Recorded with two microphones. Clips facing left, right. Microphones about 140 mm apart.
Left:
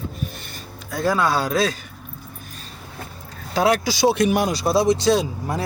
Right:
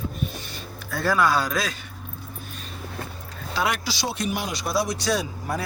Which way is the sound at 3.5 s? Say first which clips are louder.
Left 7 dB; 40° left (ahead or behind).